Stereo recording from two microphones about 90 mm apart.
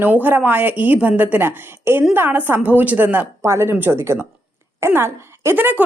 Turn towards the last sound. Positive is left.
turn(degrees=-20)  # may be behind; listen again after turning